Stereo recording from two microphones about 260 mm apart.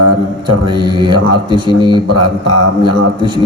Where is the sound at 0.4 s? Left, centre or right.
Centre.